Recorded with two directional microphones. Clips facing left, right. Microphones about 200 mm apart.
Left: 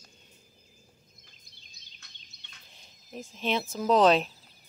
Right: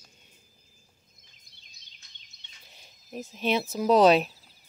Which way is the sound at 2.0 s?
65° left (ahead or behind).